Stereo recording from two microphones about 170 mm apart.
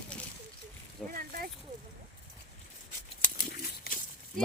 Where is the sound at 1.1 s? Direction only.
55° right (ahead or behind).